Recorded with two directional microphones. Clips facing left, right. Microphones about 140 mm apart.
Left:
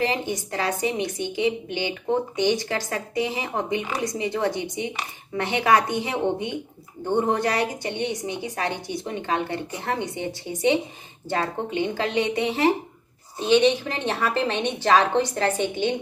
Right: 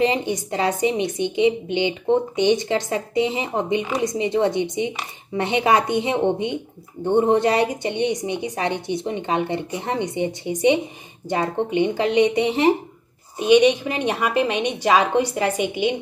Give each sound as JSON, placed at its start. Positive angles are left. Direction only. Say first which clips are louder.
{"t": 0.0, "sound": "a woman's voice", "louder": "right 5 dB", "side_deg": -20}